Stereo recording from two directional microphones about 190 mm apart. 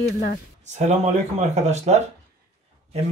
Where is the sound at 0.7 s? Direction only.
35° right (ahead or behind).